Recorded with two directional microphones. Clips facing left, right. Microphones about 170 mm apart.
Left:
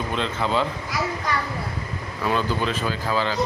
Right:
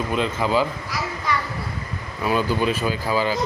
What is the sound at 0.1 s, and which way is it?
Speech, 10° right (ahead or behind).